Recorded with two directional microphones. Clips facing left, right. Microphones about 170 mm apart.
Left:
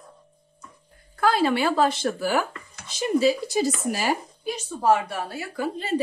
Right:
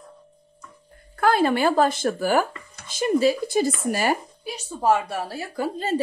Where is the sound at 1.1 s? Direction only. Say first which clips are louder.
Right 2 dB; 55° right (ahead or behind).